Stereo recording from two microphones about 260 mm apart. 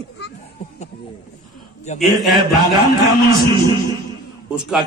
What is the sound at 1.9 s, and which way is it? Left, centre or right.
Speech, left.